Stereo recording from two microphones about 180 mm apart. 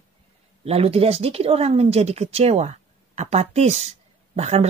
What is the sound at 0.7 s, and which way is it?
Speech, 35° right (ahead or behind).